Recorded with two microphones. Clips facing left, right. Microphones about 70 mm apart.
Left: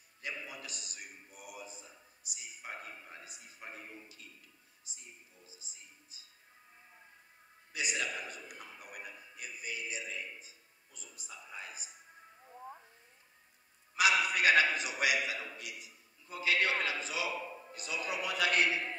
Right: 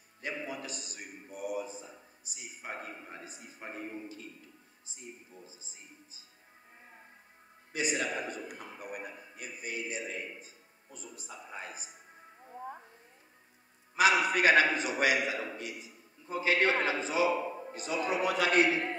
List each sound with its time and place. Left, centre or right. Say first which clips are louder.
0.2 s a man's voice: right 5 dB; right
4.8 s music: right 8 dB; right
7.7 s a man's voice: right 5 dB; right
13.9 s a man's voice: right 4 dB; right